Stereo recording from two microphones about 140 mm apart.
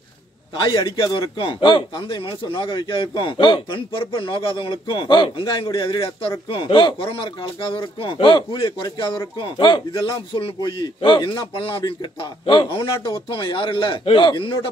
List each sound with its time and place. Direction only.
0.6 s a man's voice: 35° left (ahead or behind)